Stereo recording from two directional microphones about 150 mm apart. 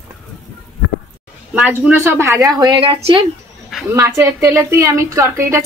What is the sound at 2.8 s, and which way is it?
Speech, 35° right (ahead or behind).